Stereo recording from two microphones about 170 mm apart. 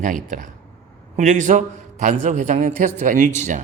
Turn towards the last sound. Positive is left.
turn(degrees=-45)  # may be behind; listen again after turning